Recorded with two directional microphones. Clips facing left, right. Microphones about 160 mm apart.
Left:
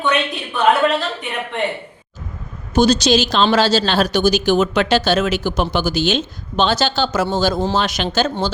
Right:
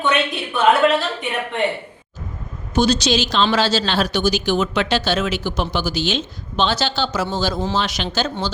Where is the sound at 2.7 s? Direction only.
40° left (ahead or behind).